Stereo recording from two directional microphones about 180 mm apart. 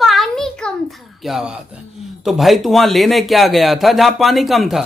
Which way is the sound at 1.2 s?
Centre (ahead or behind).